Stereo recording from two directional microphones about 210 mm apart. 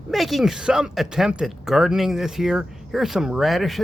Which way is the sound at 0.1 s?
Centre (ahead or behind).